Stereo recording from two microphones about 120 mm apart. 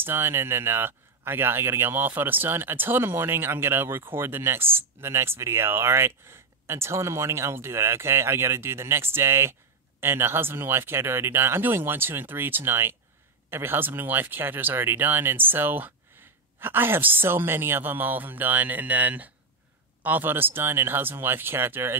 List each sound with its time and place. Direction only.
0.0 s a woman's voice: 20° right (ahead or behind)